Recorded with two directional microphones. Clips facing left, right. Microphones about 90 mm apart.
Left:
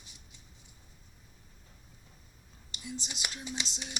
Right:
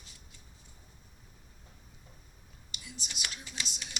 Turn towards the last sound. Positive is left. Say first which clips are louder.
# left 4 dB
turn(degrees=20)  # may be behind; listen again after turning